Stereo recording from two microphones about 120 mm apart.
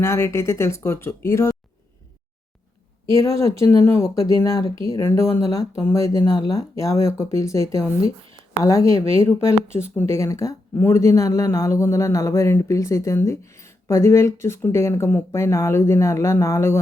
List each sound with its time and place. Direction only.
0.0 s speech: 25° left (ahead or behind)
3.1 s speech: 25° left (ahead or behind)